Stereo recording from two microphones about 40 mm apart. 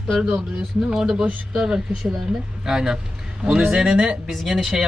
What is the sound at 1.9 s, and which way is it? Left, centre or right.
Speech, centre.